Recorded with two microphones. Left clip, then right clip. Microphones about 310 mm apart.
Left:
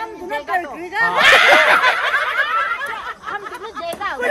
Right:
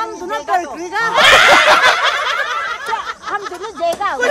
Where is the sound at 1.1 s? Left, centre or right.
Right.